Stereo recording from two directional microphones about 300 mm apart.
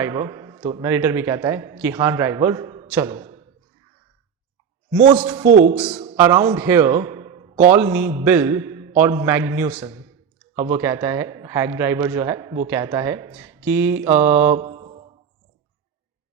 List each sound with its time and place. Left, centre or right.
0.0 s a man's voice: centre
5.1 s a man's voice: centre
5.5 s speech: right
5.7 s a man's voice: centre
7.7 s a man's voice: centre
14.6 s mantra: centre